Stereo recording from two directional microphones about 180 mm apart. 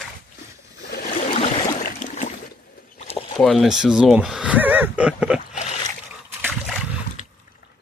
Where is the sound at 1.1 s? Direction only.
45° left (ahead or behind).